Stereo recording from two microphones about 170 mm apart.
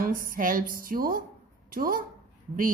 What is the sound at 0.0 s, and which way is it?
A woman's voice, 55° right (ahead or behind).